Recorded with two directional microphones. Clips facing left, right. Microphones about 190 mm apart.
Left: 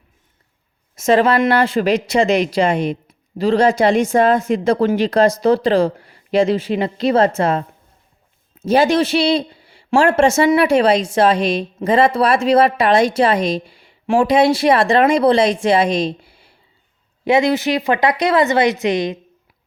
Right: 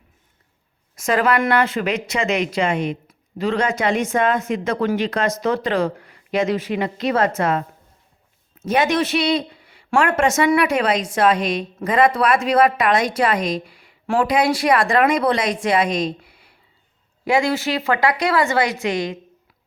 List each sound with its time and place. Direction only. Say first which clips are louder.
0.9 s speech: left 5 dB; 25° left (ahead or behind)